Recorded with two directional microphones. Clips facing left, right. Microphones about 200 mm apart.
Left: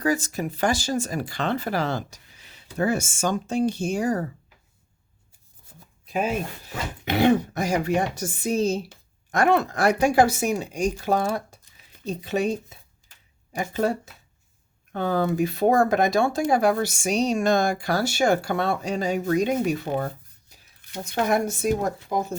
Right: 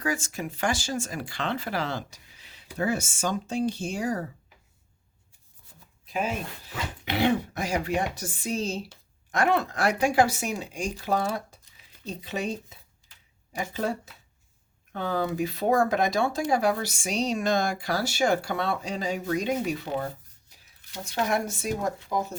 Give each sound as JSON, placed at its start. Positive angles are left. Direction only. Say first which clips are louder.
{"t": 0.0, "sound": "speech", "louder": "left 6 dB", "side_deg": 40}
{"t": 6.1, "sound": "speech", "louder": "left 4 dB", "side_deg": 45}
{"t": 13.5, "sound": "speech", "louder": "left 5 dB", "side_deg": 50}
{"t": 20.8, "sound": "speech", "louder": "left 4 dB", "side_deg": 60}